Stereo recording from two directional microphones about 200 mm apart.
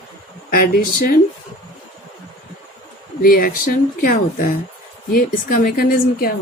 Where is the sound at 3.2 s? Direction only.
45° left (ahead or behind).